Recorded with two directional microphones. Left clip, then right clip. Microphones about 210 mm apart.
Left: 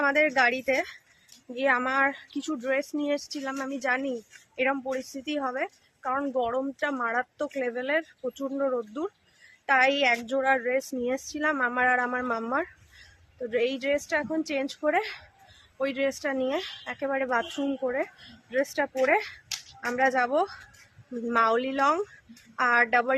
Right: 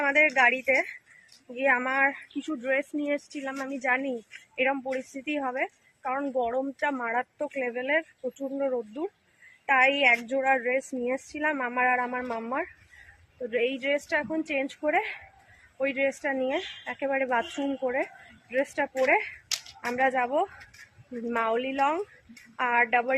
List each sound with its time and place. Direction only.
0.0 s a woman's voice: 10° left (ahead or behind)
10.2 s a woman's voice: centre (ahead or behind)
16.1 s a woman's voice: centre (ahead or behind); by 23.1 s 15° left (ahead or behind)